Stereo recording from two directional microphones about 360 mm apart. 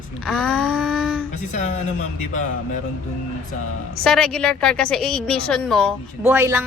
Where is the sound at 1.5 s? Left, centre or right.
Centre.